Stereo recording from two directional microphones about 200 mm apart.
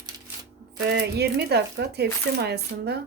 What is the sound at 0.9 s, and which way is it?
Speech, 55° right (ahead or behind).